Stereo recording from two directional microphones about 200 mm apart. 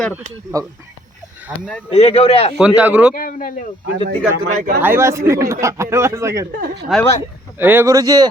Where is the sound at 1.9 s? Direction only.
30° left (ahead or behind).